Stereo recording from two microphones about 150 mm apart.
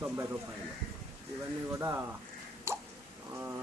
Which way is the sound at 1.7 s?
20° right (ahead or behind).